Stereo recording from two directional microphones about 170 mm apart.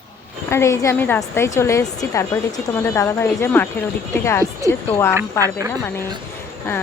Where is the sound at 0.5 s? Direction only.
15° left (ahead or behind).